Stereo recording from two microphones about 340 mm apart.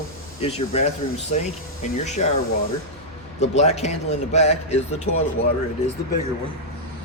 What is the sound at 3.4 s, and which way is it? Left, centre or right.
A man's voice, centre.